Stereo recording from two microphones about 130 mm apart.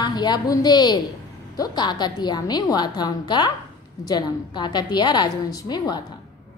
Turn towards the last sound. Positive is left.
turn(degrees=30)  # may be behind; listen again after turning